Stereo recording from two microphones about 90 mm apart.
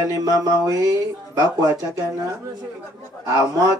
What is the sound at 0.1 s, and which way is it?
Speech, 40° right (ahead or behind).